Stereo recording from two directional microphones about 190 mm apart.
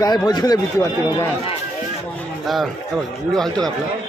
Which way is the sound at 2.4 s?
Centre (ahead or behind).